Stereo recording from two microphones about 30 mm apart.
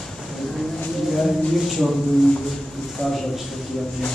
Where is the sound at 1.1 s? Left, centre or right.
Centre.